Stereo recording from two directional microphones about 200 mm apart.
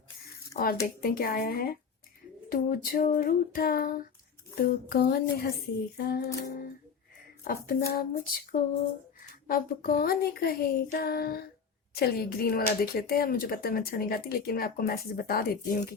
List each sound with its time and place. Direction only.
0.6 s speech: 50° left (ahead or behind)